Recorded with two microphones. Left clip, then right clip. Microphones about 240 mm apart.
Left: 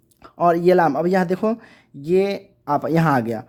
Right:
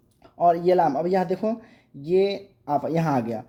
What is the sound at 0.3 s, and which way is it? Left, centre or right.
A man's voice, left.